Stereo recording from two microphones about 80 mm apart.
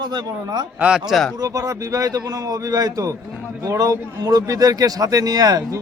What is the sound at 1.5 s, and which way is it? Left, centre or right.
Speech, right.